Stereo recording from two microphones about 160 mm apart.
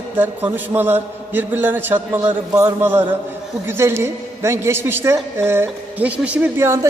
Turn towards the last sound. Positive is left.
turn(degrees=-15)  # may be behind; listen again after turning